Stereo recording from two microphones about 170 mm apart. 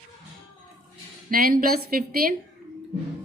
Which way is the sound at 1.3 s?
60° right (ahead or behind).